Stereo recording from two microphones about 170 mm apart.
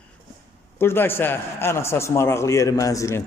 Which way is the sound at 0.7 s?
15° left (ahead or behind).